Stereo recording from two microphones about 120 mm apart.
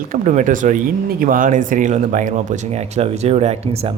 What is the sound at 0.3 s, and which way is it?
Speech, 90° right.